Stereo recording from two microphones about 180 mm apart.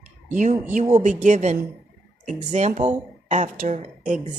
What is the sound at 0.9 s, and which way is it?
A woman's voice, 45° right (ahead or behind).